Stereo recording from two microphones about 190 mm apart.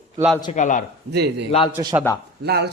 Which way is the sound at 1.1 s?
60° right (ahead or behind).